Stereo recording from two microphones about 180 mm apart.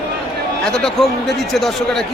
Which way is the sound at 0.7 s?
5° left (ahead or behind).